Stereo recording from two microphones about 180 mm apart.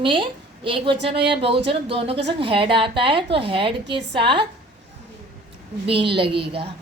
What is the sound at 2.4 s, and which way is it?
A woman's voice, 30° right (ahead or behind).